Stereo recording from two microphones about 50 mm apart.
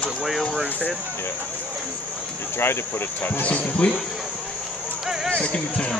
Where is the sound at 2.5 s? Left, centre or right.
Left.